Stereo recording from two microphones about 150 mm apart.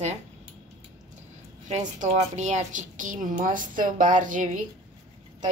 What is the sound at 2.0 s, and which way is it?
A woman's voice, 50° right (ahead or behind).